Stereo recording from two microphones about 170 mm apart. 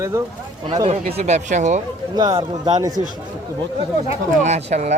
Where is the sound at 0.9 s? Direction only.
40° right (ahead or behind).